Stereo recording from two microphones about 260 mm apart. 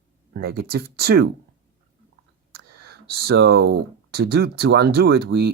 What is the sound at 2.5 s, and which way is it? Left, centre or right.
Speech, right.